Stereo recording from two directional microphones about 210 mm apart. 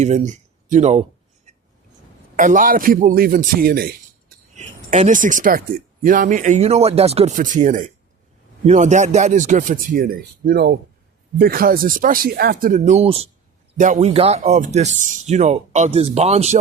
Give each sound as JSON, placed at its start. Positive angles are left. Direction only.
{"t": 0.0, "sound": "speech", "side_deg": -35}
{"t": 2.3, "sound": "speech", "side_deg": -40}
{"t": 4.5, "sound": "speech", "side_deg": -35}